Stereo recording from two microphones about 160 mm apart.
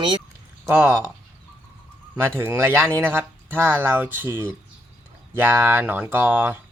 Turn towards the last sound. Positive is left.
turn(degrees=-10)  # may be behind; listen again after turning